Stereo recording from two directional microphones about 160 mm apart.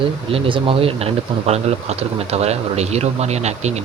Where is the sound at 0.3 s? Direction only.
35° right (ahead or behind).